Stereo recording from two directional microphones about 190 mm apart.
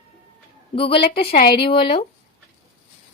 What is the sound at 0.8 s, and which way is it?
Speech, 30° left (ahead or behind).